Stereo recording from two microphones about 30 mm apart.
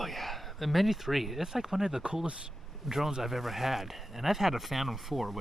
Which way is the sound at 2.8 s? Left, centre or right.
Centre.